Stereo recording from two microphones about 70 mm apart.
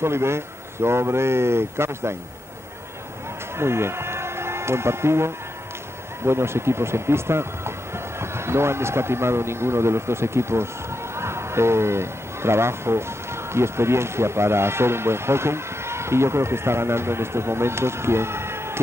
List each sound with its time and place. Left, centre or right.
0.0 s speech: right
3.5 s a man's voice: right